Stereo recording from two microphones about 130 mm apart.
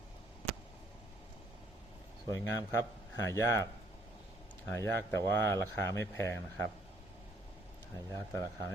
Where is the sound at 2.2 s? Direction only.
25° left (ahead or behind).